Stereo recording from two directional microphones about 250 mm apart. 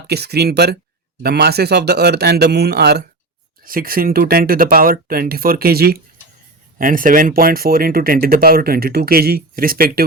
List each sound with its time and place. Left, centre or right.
0.1 s speech: right